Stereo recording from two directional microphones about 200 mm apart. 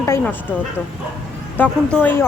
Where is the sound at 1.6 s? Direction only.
10° left (ahead or behind).